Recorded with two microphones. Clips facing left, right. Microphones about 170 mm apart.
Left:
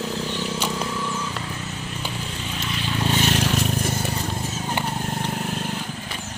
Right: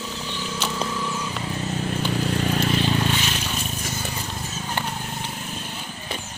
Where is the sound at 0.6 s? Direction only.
Centre (ahead or behind).